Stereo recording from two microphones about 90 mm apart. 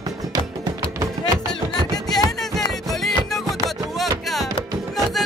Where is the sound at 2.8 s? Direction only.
5° left (ahead or behind).